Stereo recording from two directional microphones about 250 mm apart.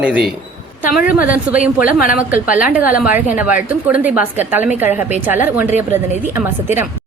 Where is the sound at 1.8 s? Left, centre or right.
Left.